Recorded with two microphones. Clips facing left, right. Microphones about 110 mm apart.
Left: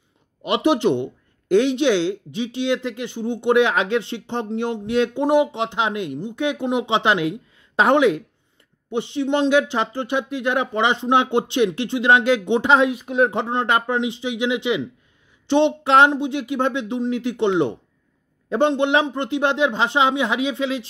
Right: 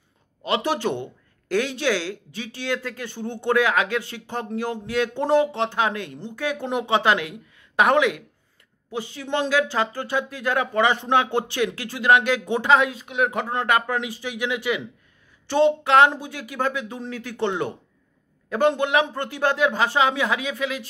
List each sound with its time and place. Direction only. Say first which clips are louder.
0.5 s speech: left 5 dB; 20° left (ahead or behind)